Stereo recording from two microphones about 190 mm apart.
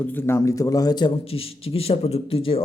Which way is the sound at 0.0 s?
10° left (ahead or behind).